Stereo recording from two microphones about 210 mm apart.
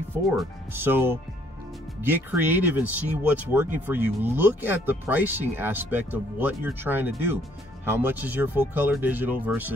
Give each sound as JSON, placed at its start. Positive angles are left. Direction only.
{"t": 0.3, "sound": "speech", "side_deg": -10}